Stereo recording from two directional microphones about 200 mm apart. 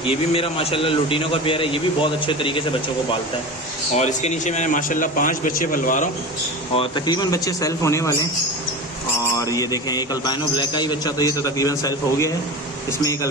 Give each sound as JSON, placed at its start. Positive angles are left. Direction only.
{"t": 0.0, "sound": "a man's voice", "side_deg": 30}
{"t": 3.9, "sound": "a man's voice", "side_deg": 35}
{"t": 6.7, "sound": "a man's voice", "side_deg": 25}
{"t": 9.4, "sound": "a man's voice", "side_deg": 15}